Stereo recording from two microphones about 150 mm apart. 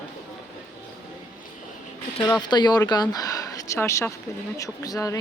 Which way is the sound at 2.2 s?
25° left (ahead or behind).